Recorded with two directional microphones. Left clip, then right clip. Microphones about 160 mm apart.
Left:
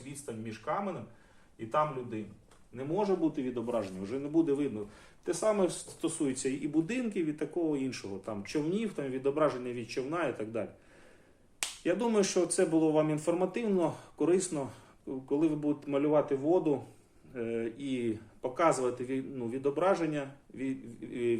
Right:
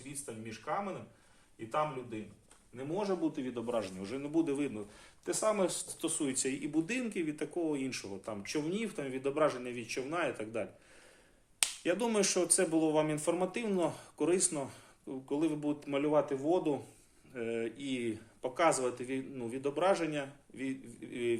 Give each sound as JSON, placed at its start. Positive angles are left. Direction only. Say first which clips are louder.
{"t": 0.3, "sound": "a man's voice", "louder": "left 3 dB", "side_deg": -20}